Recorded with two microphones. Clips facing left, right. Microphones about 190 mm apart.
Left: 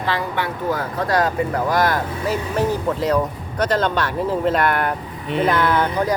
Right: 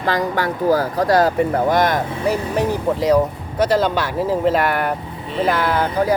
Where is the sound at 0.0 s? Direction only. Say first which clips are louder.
Right 4 dB; 40° right (ahead or behind); by 2.0 s 20° right (ahead or behind).